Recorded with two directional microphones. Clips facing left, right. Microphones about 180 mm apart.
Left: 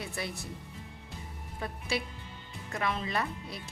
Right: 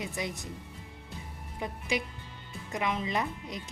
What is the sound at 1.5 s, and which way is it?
A woman's voice, 15° right (ahead or behind).